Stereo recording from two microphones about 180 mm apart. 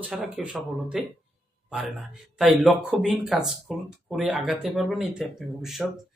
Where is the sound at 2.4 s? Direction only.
Centre (ahead or behind).